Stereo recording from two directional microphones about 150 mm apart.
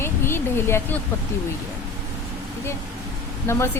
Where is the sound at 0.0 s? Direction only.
15° left (ahead or behind).